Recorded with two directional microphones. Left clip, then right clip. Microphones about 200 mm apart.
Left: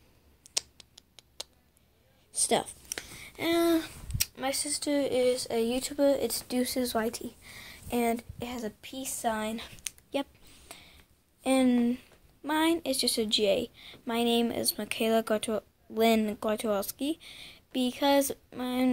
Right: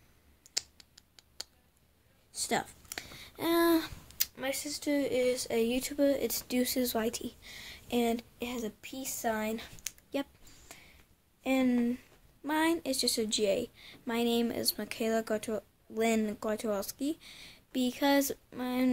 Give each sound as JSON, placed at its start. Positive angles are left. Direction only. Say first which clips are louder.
{"t": 0.4, "sound": "computer keyboard", "louder": "left 3 dB", "side_deg": 0}
{"t": 2.3, "sound": "a sound", "louder": "left 5 dB", "side_deg": -5}
{"t": 4.4, "sound": "speech", "louder": "left 3 dB", "side_deg": 5}